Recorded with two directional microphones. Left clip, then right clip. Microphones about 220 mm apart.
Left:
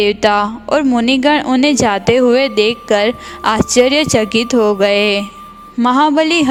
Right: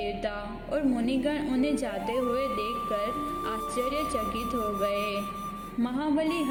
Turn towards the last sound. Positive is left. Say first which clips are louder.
# left 17 dB
turn(degrees=50)  # may be behind; listen again after turning